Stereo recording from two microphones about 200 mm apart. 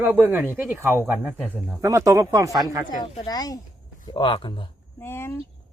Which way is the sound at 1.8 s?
15° right (ahead or behind).